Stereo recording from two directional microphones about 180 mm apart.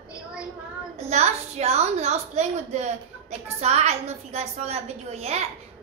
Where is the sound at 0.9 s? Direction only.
40° right (ahead or behind).